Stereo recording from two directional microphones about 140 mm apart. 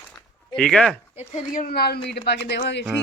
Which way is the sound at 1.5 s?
90° left.